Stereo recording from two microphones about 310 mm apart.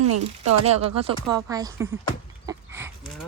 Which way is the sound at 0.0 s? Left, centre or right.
Right.